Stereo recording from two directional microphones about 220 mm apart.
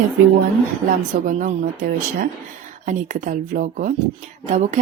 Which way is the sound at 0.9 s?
35° right (ahead or behind).